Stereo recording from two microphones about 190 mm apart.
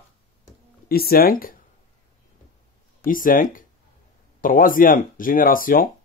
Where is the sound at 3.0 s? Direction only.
45° left (ahead or behind).